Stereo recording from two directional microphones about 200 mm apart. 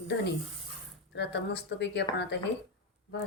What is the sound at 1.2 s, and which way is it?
Speech, 60° left (ahead or behind).